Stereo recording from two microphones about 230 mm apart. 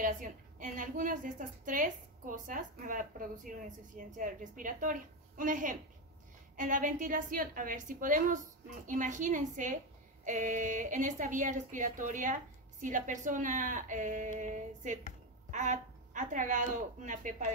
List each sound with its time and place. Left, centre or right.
0.0 s a woman's voice: right